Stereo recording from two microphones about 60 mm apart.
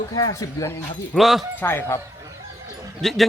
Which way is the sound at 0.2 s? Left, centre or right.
Left.